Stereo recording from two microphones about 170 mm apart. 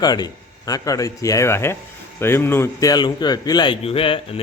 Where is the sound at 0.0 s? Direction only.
25° left (ahead or behind).